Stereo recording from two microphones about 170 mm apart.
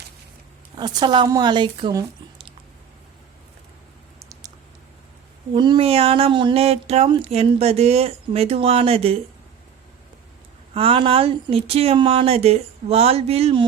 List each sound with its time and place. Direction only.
0.8 s a woman's voice: 25° right (ahead or behind)
5.5 s speech: 30° right (ahead or behind)
10.8 s speech: 30° right (ahead or behind)